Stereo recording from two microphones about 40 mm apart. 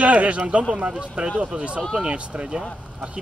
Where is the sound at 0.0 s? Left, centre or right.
Right.